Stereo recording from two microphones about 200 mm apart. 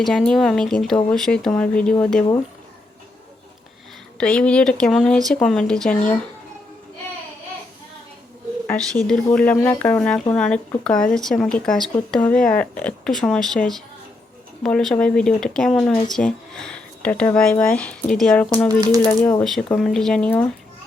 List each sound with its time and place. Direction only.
0.0 s speech: centre (ahead or behind)
4.2 s speech: 5° left (ahead or behind)
8.6 s speech: 5° left (ahead or behind)
18.7 s speech: 15° right (ahead or behind)
19.0 s speech: 5° left (ahead or behind)